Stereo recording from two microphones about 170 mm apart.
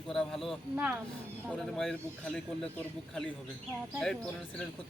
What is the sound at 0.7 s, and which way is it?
Speech, 10° right (ahead or behind).